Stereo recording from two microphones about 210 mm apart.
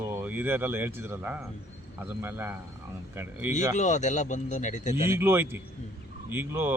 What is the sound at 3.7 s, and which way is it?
A man's voice, 35° left (ahead or behind).